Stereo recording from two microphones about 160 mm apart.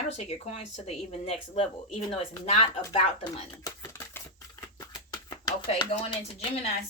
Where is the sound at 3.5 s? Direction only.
20° left (ahead or behind).